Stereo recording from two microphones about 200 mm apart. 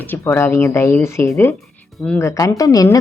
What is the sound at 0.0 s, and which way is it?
Speech, 10° left (ahead or behind).